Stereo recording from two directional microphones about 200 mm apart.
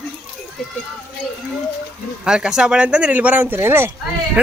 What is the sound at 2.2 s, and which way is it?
Speech, 5° right (ahead or behind).